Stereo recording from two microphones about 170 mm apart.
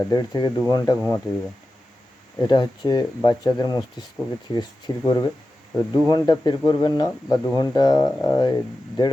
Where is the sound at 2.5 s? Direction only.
25° left (ahead or behind).